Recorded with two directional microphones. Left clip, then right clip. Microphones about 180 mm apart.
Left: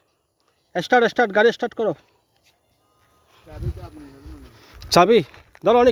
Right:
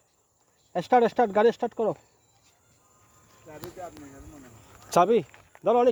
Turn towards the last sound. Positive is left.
turn(degrees=50)  # may be behind; listen again after turning